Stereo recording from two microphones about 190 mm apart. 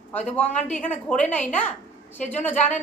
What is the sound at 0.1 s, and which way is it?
A woman's voice, 5° left (ahead or behind).